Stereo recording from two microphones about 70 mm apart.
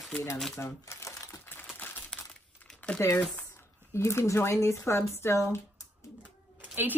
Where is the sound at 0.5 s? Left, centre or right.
Left.